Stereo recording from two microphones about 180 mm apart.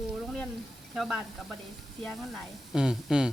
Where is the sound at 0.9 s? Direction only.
Centre (ahead or behind).